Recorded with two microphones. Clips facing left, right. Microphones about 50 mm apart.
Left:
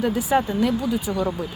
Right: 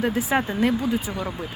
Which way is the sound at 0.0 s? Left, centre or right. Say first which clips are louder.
Left 2 dB; right.